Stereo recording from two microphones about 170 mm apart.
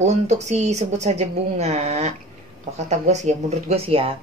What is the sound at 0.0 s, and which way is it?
Speech, 40° right (ahead or behind).